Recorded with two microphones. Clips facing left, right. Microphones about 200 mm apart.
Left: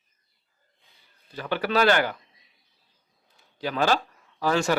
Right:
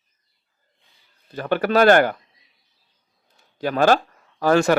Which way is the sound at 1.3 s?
50° right (ahead or behind).